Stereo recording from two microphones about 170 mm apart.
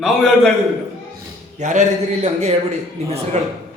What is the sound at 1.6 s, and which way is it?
A man's voice, 45° right (ahead or behind).